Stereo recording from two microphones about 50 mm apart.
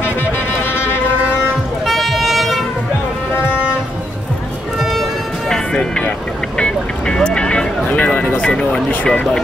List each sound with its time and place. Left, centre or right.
1.9 s vehicle: centre
5.8 s music: left
6.6 s vehicle: centre
8.0 s a sound: left
8.8 s speech: left